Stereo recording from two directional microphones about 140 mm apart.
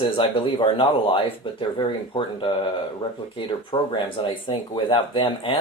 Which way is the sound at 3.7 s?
30° left (ahead or behind).